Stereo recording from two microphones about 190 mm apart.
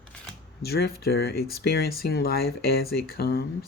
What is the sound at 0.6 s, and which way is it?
Speech, 55° left (ahead or behind).